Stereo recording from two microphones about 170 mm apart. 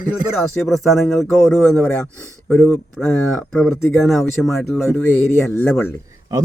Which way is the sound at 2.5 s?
Centre (ahead or behind).